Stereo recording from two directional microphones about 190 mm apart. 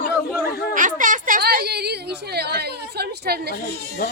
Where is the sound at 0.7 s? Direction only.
45° right (ahead or behind).